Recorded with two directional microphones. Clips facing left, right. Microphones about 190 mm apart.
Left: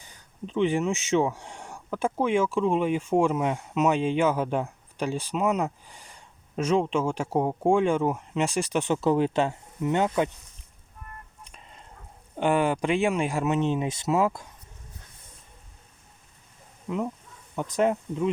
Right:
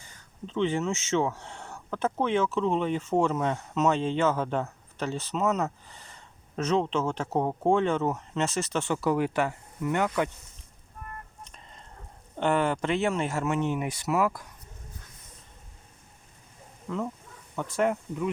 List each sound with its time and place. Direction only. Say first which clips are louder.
0.1 s speech: left 3 dB; 15° left (ahead or behind)
12.4 s speech: left 2 dB; 15° left (ahead or behind)
16.9 s speech: left 3 dB; 15° left (ahead or behind)